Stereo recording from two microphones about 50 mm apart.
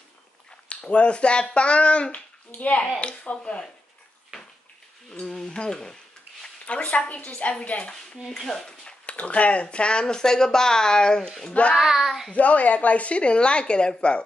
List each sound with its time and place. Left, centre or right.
0.7 s a woman's voice: left
5.1 s a woman's voice: centre
8.3 s speech: centre
9.0 s speech: left
11.7 s speech: centre
12.3 s a woman's voice: left